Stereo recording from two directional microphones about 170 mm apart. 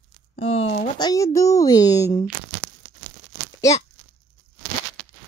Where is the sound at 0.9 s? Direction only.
20° left (ahead or behind).